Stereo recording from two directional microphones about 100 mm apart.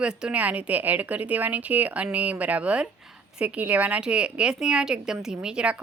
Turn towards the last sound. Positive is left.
turn(degrees=-10)  # may be behind; listen again after turning